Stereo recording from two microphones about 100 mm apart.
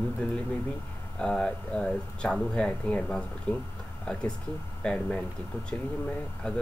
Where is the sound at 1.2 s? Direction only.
10° left (ahead or behind).